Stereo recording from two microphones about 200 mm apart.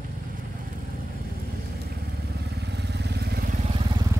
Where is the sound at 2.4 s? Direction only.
55° right (ahead or behind).